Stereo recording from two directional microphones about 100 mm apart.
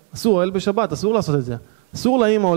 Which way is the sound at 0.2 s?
15° right (ahead or behind).